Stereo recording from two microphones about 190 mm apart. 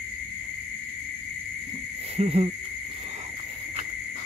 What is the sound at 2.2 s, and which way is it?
Hoot, 30° right (ahead or behind).